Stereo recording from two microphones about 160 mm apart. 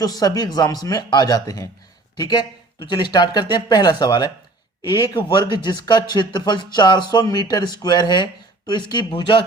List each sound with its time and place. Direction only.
0.0 s speech: 25° left (ahead or behind)